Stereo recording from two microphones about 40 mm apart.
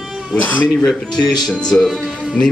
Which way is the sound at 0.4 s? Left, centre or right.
Left.